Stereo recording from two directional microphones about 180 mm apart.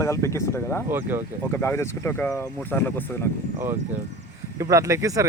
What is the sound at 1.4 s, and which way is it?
Speech, 15° left (ahead or behind).